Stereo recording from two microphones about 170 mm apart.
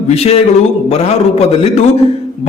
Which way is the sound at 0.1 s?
35° left (ahead or behind).